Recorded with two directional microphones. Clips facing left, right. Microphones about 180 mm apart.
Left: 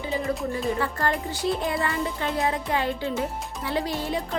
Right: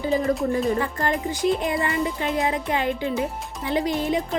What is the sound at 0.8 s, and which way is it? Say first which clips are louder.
Music: right 2 dB; 20° right (ahead or behind).